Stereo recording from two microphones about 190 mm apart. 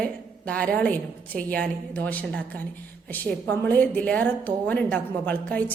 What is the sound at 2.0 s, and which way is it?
A woman's voice, 10° left (ahead or behind).